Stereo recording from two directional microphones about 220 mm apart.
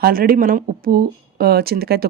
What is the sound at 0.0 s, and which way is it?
Speech, 40° right (ahead or behind).